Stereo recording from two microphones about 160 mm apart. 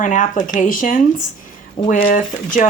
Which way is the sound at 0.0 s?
50° left (ahead or behind).